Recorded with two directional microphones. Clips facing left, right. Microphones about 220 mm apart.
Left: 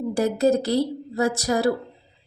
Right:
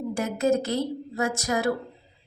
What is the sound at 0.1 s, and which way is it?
A woman's voice, 35° left (ahead or behind).